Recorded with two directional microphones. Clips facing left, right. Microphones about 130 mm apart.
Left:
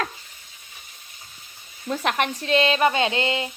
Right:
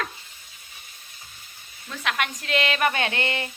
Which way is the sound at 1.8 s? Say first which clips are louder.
Left 5 dB; 35° left (ahead or behind).